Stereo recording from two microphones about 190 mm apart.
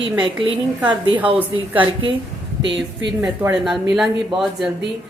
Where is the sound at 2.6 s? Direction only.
70° right (ahead or behind).